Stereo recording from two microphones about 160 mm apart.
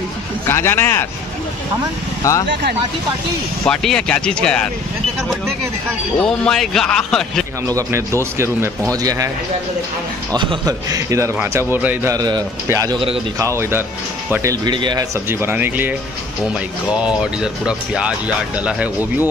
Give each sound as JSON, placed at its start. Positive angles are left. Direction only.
{"t": 0.5, "sound": "speech", "side_deg": 15}
{"t": 2.2, "sound": "speech", "side_deg": 20}
{"t": 3.6, "sound": "speech", "side_deg": 5}
{"t": 6.1, "sound": "speech", "side_deg": 5}
{"t": 7.6, "sound": "a man's voice", "side_deg": -20}
{"t": 10.3, "sound": "a man's voice", "side_deg": -30}
{"t": 15.2, "sound": "a man's voice", "side_deg": -15}